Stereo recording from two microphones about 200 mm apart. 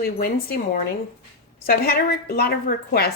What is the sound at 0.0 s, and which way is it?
Speech, 50° left (ahead or behind).